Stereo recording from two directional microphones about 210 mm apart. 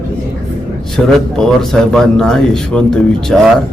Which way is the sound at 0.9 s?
Centre (ahead or behind).